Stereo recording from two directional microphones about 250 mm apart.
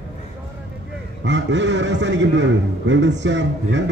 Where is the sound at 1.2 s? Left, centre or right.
Right.